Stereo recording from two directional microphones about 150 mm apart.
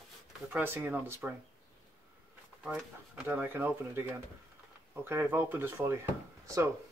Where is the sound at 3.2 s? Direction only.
15° right (ahead or behind).